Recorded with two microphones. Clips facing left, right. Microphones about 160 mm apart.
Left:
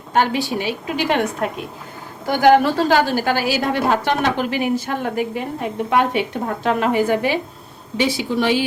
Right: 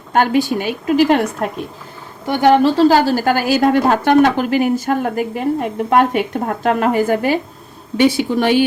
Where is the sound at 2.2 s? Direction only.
25° right (ahead or behind).